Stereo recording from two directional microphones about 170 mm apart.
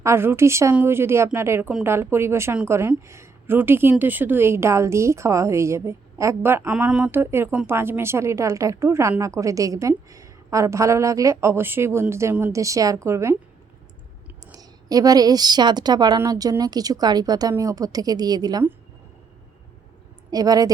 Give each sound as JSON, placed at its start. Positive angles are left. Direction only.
{"t": 0.0, "sound": "a woman's voice", "side_deg": -15}
{"t": 14.5, "sound": "a woman's voice", "side_deg": -20}
{"t": 20.3, "sound": "a woman's voice", "side_deg": -20}